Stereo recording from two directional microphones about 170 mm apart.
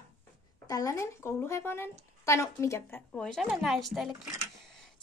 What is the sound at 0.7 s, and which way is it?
A woman's voice, 20° left (ahead or behind).